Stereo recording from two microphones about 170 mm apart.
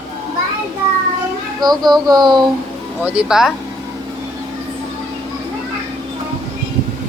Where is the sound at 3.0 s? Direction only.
5° right (ahead or behind).